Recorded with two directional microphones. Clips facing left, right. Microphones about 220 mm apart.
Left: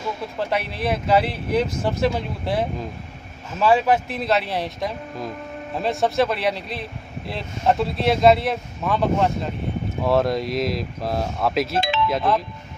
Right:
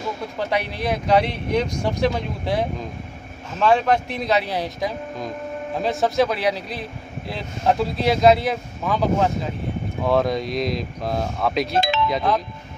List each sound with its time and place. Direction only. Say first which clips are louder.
0.4 s speech: even; centre (ahead or behind)
11.8 s music: right 1 dB; 40° right (ahead or behind)
12.1 s speech: even; centre (ahead or behind)